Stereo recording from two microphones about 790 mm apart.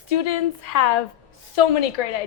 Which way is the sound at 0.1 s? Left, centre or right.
Left.